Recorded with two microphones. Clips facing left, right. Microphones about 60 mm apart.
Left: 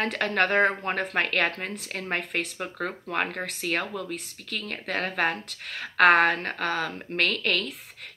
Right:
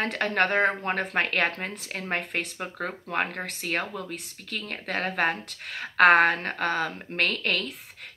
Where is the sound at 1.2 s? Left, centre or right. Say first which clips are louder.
Left 1 dB; right.